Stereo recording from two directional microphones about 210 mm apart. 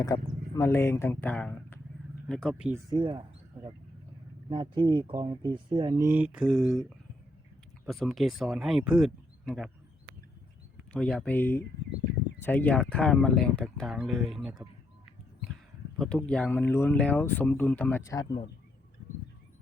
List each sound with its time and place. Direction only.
0.0 s speech: 15° left (ahead or behind); by 2.8 s 5° right (ahead or behind)
2.9 s speech: 20° right (ahead or behind); by 6.8 s centre (ahead or behind)
7.9 s speech: centre (ahead or behind)
10.9 s speech: 5° left (ahead or behind)
16.0 s speech: 5° left (ahead or behind)